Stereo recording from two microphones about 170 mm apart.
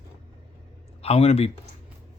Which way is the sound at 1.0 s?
35° left (ahead or behind).